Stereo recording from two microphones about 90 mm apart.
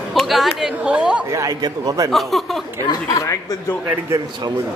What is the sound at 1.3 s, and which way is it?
Speech, 40° right (ahead or behind).